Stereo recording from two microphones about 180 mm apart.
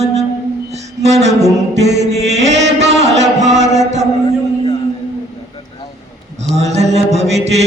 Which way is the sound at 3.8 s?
40° right (ahead or behind).